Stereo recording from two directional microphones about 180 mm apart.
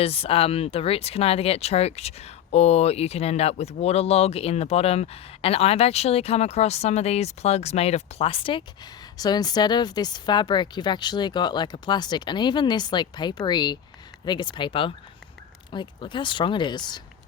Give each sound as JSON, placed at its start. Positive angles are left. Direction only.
{"t": 0.0, "sound": "speech", "side_deg": 35}